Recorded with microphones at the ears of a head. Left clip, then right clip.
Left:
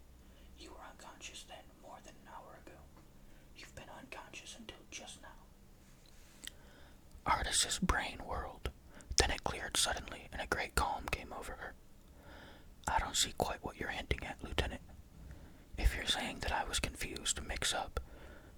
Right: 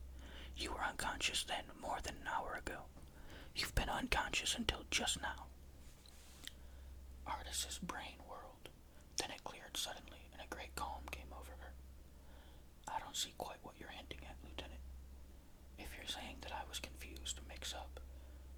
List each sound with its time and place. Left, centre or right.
0.3 s speech: right
7.3 s speech: left